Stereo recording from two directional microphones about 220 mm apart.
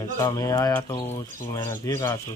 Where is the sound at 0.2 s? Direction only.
15° left (ahead or behind).